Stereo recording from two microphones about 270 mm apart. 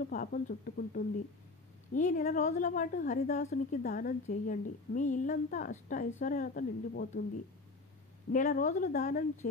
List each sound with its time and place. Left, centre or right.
0.1 s a woman's voice: left
8.3 s a woman's voice: left